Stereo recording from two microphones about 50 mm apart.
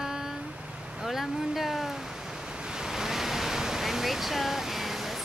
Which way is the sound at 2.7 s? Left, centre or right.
Centre.